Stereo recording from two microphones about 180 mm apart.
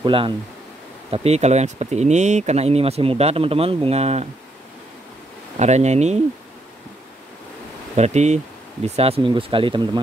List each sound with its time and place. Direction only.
0.0 s speech: 30° right (ahead or behind)
5.6 s speech: 40° right (ahead or behind)
7.9 s speech: 40° right (ahead or behind)